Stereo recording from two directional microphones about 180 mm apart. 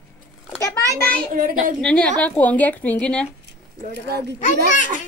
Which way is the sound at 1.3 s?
50° right (ahead or behind).